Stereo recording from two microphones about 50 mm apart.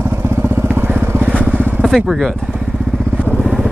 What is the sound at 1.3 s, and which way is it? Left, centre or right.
Vehicle, right.